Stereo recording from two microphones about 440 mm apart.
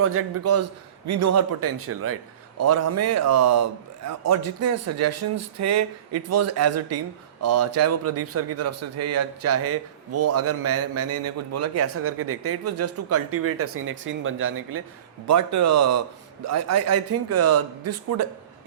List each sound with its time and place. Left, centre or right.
0.0 s a man's voice: right
15.3 s a man's voice: right